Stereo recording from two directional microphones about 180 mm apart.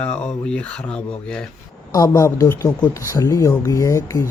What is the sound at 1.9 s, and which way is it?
Speech, 20° left (ahead or behind).